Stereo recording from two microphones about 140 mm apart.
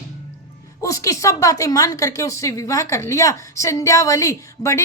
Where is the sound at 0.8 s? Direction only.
20° left (ahead or behind).